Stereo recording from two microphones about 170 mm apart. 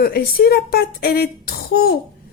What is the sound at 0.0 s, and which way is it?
A woman's voice, 65° left (ahead or behind).